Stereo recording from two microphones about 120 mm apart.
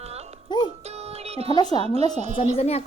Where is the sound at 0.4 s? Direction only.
40° left (ahead or behind).